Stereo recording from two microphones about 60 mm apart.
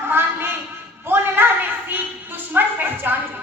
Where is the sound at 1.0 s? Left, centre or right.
Right.